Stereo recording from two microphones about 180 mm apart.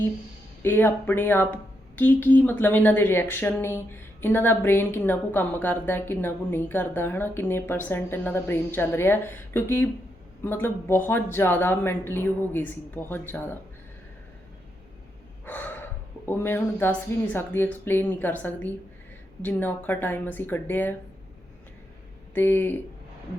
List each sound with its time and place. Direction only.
0.6 s a woman's voice: 10° left (ahead or behind)
15.4 s gasp: 10° left (ahead or behind)
17.3 s a woman's voice: 10° left (ahead or behind)
22.4 s a woman's voice: 10° left (ahead or behind)